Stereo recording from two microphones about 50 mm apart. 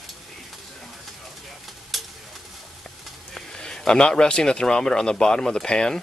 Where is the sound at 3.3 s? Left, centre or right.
Centre.